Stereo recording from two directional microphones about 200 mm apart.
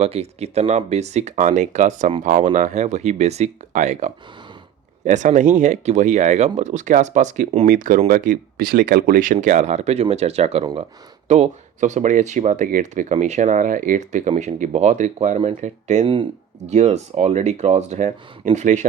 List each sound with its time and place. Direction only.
0.0 s speech: 30° right (ahead or behind)